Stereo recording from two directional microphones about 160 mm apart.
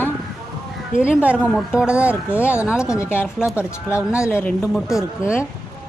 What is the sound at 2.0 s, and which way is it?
Speech, 15° left (ahead or behind).